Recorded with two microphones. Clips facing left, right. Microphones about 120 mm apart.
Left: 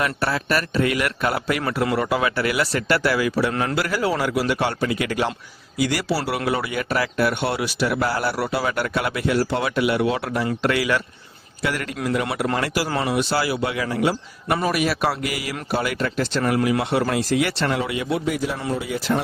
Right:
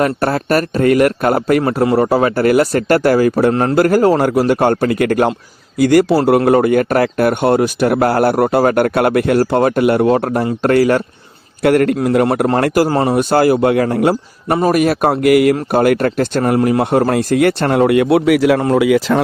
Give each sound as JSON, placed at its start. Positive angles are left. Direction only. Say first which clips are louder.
{"t": 0.0, "sound": "speech", "louder": "right 8 dB", "side_deg": -45}
{"t": 11.6, "sound": "a man's voice", "louder": "right 13 dB", "side_deg": -55}
{"t": 16.4, "sound": "speech", "louder": "right 7 dB", "side_deg": -40}
{"t": 18.7, "sound": "speech", "louder": "right 11 dB", "side_deg": -90}